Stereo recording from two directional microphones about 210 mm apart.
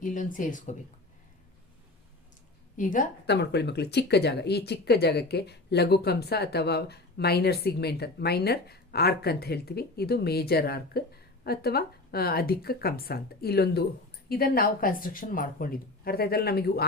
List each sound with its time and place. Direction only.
0.0 s speech: 40° left (ahead or behind)
2.7 s speech: 40° left (ahead or behind)
3.2 s speech: 55° left (ahead or behind)